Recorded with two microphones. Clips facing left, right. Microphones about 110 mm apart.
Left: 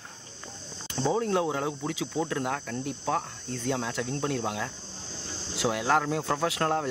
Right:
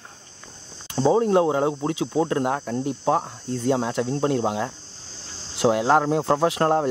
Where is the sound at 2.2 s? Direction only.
45° right (ahead or behind).